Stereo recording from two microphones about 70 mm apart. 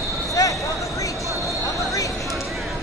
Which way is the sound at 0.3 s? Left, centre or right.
Left.